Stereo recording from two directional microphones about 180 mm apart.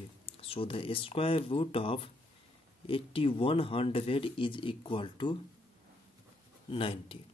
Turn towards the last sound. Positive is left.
turn(degrees=30)  # may be behind; listen again after turning